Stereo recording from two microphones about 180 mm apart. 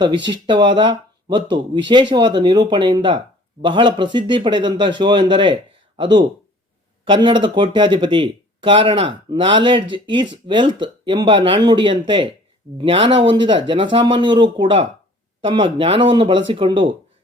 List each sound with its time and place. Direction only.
0.3 s speech: 25° right (ahead or behind)